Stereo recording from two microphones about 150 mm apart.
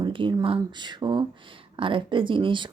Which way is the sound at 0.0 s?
35° right (ahead or behind).